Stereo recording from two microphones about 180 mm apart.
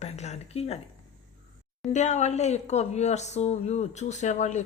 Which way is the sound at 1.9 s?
40° left (ahead or behind).